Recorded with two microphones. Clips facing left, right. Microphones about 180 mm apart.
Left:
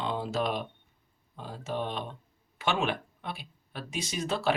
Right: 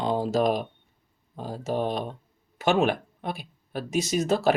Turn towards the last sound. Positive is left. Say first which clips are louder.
# right 8 dB
turn(degrees=-45)  # may be behind; listen again after turning